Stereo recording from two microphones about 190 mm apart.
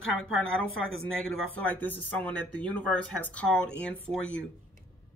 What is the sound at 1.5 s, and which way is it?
Speech, 10° left (ahead or behind).